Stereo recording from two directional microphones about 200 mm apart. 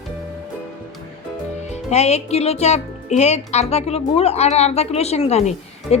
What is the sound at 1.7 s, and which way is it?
Speech, 35° left (ahead or behind).